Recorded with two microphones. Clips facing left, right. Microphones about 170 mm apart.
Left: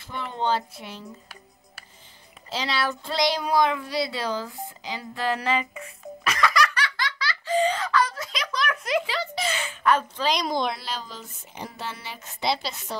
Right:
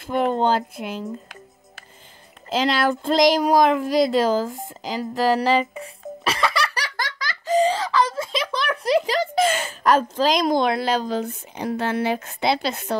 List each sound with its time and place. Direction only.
0.3 s speech: 45° right (ahead or behind)
2.5 s speech: 50° right (ahead or behind)